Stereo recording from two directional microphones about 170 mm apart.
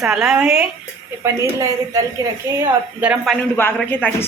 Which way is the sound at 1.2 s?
20° right (ahead or behind).